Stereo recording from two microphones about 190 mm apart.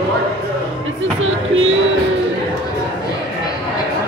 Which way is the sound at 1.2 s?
90° right.